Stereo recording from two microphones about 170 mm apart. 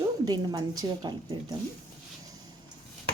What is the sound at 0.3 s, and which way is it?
Speech, 20° right (ahead or behind).